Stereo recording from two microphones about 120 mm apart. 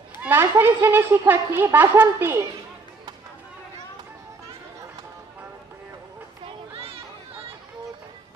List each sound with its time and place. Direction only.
0.2 s a woman's voice: 15° right (ahead or behind)
6.4 s children playing: 50° right (ahead or behind)